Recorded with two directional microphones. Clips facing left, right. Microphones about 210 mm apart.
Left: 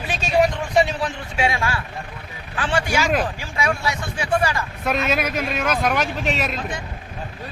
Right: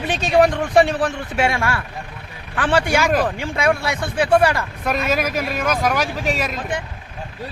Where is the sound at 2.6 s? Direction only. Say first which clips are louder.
Right 4 dB; 55° right (ahead or behind).